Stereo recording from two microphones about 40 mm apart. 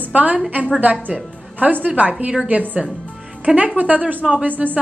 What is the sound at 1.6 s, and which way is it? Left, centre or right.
A woman's voice, right.